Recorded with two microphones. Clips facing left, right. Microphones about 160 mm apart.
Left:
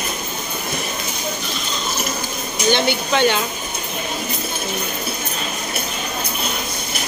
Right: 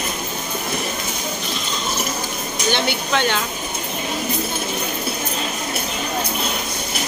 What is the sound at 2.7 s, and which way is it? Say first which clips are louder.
Speech: left 2 dB; 5° left (ahead or behind).